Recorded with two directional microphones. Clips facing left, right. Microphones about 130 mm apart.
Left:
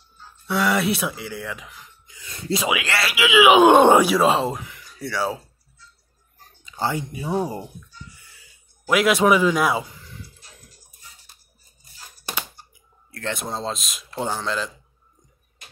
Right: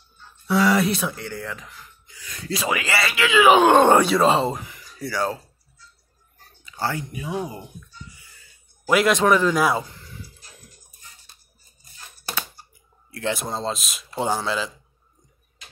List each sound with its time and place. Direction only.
0.5 s speech: centre (ahead or behind)
2.0 s speech: 25° left (ahead or behind)
2.7 s speech: centre (ahead or behind)
6.6 s speech: 20° left (ahead or behind); by 7.6 s 35° left (ahead or behind)
8.8 s speech: centre (ahead or behind)
13.1 s speech: 10° right (ahead or behind)
13.4 s a man's voice: centre (ahead or behind)